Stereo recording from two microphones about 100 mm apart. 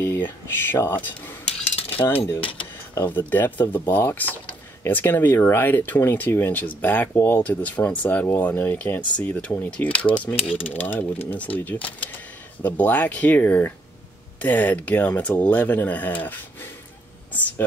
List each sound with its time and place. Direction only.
0.0 s speech: 25° left (ahead or behind)